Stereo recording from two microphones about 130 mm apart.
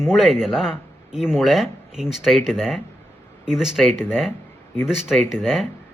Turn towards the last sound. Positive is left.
turn(degrees=0)  # may be behind; listen again after turning